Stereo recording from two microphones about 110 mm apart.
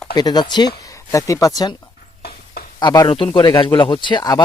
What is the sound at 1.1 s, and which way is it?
Speech, 30° left (ahead or behind).